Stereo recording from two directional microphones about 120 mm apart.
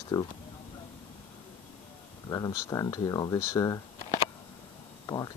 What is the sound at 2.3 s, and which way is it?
Speech, 30° left (ahead or behind).